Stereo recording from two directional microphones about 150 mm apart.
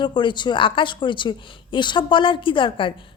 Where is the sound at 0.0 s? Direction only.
30° left (ahead or behind).